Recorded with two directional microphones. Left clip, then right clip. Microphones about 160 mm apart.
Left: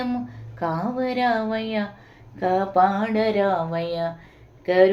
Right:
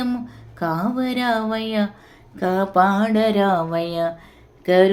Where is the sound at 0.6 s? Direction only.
35° right (ahead or behind).